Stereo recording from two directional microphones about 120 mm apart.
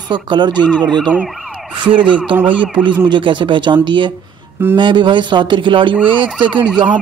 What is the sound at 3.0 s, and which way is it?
A man's voice, 40° right (ahead or behind).